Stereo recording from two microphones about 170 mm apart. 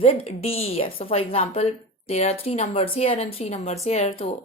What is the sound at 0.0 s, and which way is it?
A woman's voice, 35° left (ahead or behind).